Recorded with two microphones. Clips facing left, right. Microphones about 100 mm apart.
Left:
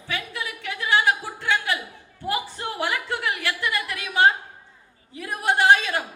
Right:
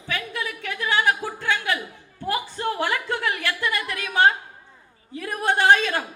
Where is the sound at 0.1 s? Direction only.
20° left (ahead or behind).